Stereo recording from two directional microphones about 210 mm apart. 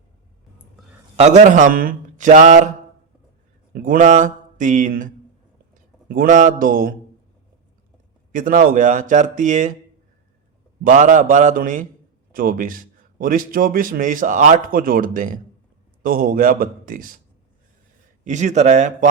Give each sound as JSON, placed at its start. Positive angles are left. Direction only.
{"t": 0.8, "sound": "a sound", "side_deg": 0}
{"t": 1.1, "sound": "a man's voice", "side_deg": -30}
{"t": 3.7, "sound": "speech", "side_deg": -45}
{"t": 8.3, "sound": "a man's voice", "side_deg": -40}
{"t": 10.8, "sound": "a man's voice", "side_deg": -40}
{"t": 18.3, "sound": "a man's voice", "side_deg": -35}